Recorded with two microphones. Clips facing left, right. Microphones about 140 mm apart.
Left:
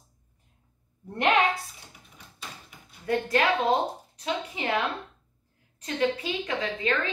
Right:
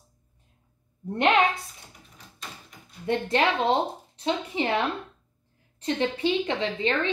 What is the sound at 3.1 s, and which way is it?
A woman's voice, 25° right (ahead or behind).